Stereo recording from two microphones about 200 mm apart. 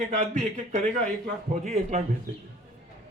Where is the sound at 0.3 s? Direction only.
40° right (ahead or behind).